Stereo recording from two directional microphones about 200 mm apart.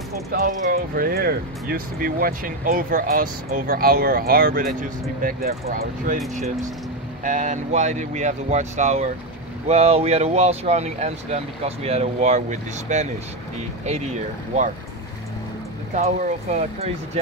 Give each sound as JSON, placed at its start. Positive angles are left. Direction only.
{"t": 0.3, "sound": "speech", "side_deg": -50}
{"t": 15.9, "sound": "speech", "side_deg": -35}